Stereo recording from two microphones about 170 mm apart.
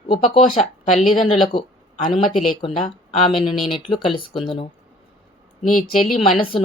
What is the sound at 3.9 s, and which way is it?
Speech, 30° left (ahead or behind).